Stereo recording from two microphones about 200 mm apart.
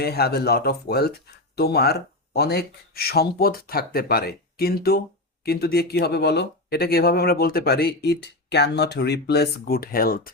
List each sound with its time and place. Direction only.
0.0 s speech: 50° left (ahead or behind)